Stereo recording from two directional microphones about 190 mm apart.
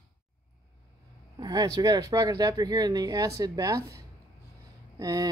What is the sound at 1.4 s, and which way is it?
Speech, 20° right (ahead or behind).